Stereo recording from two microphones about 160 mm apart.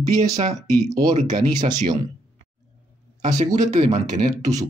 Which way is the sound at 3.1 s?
45° right (ahead or behind).